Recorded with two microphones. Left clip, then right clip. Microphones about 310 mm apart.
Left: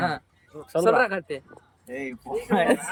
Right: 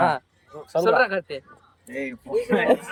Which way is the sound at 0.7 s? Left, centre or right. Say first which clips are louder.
Right 1 dB; centre.